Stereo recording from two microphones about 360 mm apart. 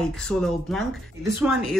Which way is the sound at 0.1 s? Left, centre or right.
Centre.